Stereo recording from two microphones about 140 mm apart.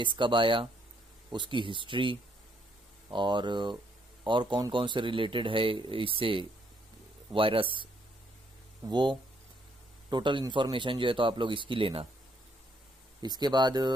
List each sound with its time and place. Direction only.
0.0 s a man's voice: 35° right (ahead or behind)
13.2 s a man's voice: 30° right (ahead or behind)